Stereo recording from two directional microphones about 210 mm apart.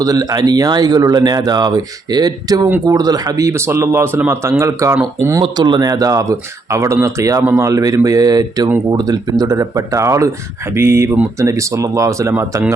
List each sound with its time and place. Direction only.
0.0 s speech: 15° right (ahead or behind)